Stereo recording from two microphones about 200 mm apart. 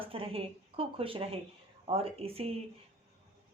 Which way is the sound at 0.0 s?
25° right (ahead or behind).